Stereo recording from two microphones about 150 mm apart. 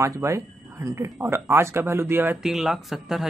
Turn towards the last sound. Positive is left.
turn(degrees=0)  # may be behind; listen again after turning